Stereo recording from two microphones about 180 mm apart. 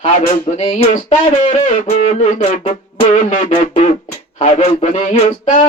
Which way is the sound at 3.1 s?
45° left (ahead or behind).